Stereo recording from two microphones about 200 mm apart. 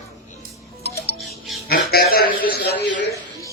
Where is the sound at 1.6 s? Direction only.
50° left (ahead or behind).